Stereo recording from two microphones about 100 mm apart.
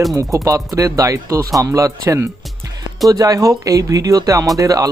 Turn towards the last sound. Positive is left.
turn(degrees=-35)  # may be behind; listen again after turning